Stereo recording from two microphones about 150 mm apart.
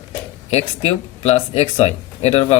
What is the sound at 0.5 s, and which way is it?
Speech, 45° left (ahead or behind).